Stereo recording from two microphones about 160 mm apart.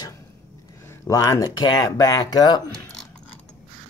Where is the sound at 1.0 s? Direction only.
20° left (ahead or behind).